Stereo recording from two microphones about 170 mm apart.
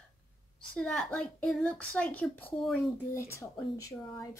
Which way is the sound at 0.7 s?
5° left (ahead or behind).